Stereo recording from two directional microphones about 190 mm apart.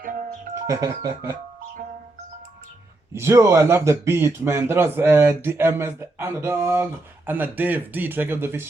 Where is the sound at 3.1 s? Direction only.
15° right (ahead or behind).